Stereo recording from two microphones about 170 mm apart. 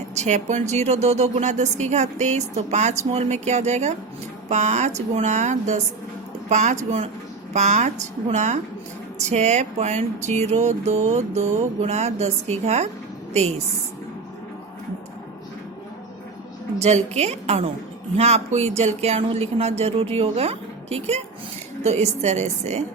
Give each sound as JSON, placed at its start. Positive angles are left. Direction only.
{"t": 0.2, "sound": "a woman's voice", "side_deg": -45}
{"t": 16.8, "sound": "speech", "side_deg": -40}